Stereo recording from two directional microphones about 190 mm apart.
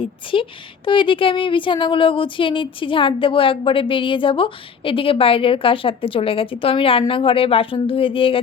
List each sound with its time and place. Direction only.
0.0 s speech: 25° left (ahead or behind)